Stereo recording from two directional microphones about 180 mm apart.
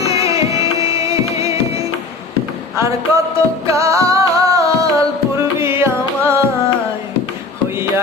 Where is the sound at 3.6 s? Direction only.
15° right (ahead or behind).